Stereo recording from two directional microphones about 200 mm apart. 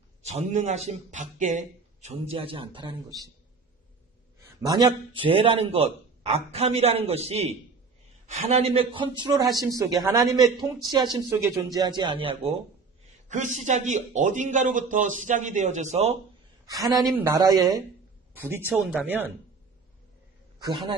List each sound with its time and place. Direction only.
0.2 s a man's voice: 35° right (ahead or behind)
4.6 s a man's voice: 20° right (ahead or behind)
13.3 s a man's voice: 40° right (ahead or behind)
16.6 s a woman's voice: 20° right (ahead or behind)
20.6 s a man's voice: 20° right (ahead or behind)